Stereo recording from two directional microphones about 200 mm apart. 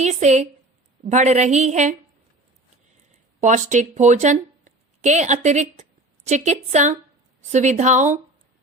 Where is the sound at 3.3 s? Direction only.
35° right (ahead or behind).